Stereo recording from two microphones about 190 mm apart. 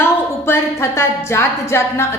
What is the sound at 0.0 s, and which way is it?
Music, 15° left (ahead or behind).